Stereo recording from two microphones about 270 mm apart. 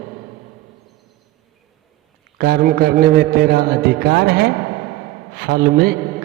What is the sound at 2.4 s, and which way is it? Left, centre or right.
A man's voice, right.